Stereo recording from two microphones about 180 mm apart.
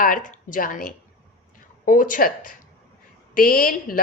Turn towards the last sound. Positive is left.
turn(degrees=50)  # may be behind; listen again after turning